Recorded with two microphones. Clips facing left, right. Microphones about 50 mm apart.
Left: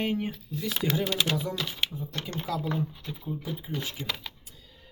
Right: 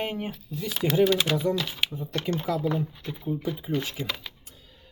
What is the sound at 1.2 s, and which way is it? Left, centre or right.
Speech, right.